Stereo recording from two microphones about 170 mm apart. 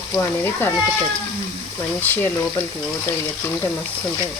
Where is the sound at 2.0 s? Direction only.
10° left (ahead or behind).